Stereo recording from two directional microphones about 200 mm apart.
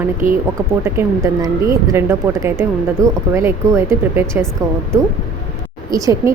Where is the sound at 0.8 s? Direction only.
15° right (ahead or behind).